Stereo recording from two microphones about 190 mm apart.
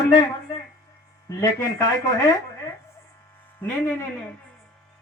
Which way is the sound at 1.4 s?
15° left (ahead or behind).